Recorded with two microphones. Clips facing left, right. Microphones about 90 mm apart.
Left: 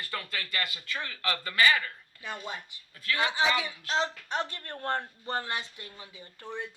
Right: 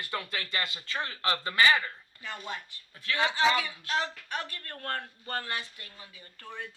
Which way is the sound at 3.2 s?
20° left (ahead or behind).